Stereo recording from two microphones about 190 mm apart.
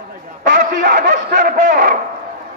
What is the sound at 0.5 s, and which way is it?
A man's voice, 45° right (ahead or behind).